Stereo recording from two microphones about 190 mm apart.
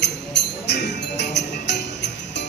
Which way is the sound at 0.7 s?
65° left (ahead or behind).